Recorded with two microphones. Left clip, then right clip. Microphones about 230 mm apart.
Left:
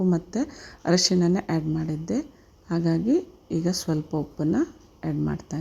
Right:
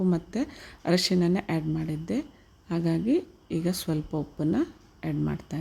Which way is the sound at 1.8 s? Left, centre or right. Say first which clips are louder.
Left 3 dB; centre.